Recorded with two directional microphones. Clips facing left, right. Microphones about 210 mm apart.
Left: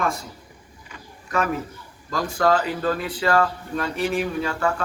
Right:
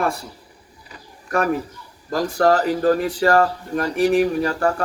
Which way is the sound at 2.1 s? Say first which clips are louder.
Right 3 dB; 40° right (ahead or behind).